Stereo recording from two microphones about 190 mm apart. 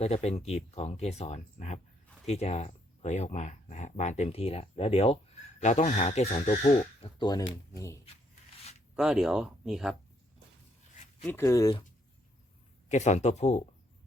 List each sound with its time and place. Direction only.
0.0 s speech: 35° left (ahead or behind)
9.0 s speech: 5° right (ahead or behind)
11.2 s speech: 10° left (ahead or behind)
12.9 s speech: 35° left (ahead or behind)